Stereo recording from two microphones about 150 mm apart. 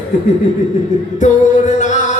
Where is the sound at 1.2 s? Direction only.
55° left (ahead or behind).